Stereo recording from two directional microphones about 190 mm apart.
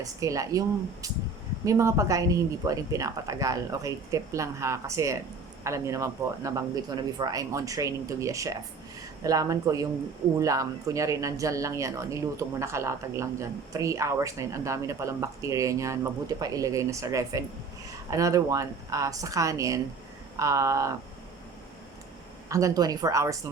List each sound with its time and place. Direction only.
0.0 s speech: 15° right (ahead or behind)
1.6 s speech: 15° right (ahead or behind)
22.4 s speech: 15° right (ahead or behind)